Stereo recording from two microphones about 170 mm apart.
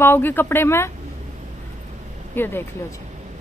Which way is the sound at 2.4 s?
15° left (ahead or behind).